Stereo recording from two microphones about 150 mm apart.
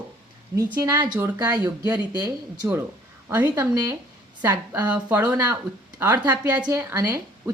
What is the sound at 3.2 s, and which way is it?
A woman's voice, 15° right (ahead or behind).